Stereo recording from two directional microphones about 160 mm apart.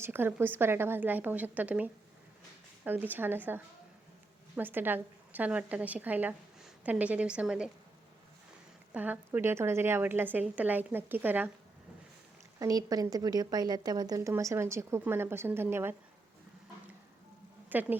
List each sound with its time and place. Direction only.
0.0 s a woman's voice: 15° right (ahead or behind)
8.9 s a woman's voice: 10° right (ahead or behind)
12.5 s a woman's voice: 25° right (ahead or behind)
17.7 s speech: 10° right (ahead or behind)